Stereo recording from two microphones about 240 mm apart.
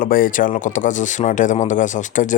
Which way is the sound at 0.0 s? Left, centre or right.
Left.